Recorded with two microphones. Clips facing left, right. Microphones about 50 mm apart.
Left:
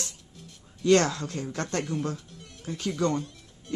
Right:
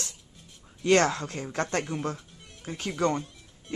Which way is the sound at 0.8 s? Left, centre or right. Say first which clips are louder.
Left 1 dB; right.